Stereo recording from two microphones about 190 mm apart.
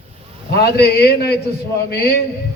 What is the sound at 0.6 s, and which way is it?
A man's voice, 60° left (ahead or behind).